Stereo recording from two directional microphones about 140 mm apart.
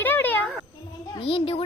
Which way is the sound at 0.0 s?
15° left (ahead or behind).